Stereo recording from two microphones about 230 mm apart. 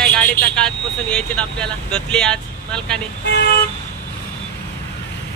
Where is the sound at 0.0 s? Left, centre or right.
Centre.